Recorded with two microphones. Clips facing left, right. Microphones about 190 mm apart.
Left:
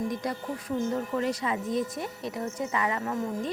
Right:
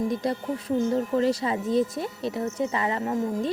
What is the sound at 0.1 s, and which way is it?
Speech, 30° right (ahead or behind).